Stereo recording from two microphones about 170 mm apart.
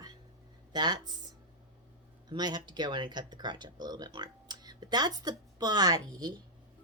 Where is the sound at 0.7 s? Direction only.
25° right (ahead or behind).